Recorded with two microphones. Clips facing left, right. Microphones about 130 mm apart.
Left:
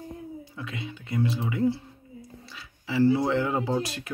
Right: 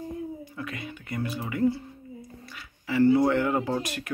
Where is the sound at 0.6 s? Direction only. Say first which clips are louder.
Left 2 dB; 10° left (ahead or behind).